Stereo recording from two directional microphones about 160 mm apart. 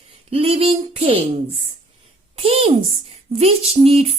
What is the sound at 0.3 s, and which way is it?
Speech, 35° right (ahead or behind).